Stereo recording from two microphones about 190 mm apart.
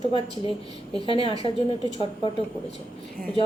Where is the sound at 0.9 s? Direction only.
30° left (ahead or behind).